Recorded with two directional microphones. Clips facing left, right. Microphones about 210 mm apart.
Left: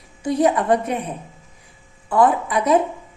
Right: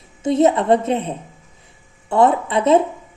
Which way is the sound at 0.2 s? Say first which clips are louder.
Right 3 dB; 25° right (ahead or behind).